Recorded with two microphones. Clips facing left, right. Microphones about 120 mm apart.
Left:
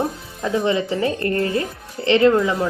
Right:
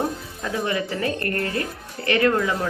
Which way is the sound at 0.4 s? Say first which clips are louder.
Left 6 dB; 25° left (ahead or behind).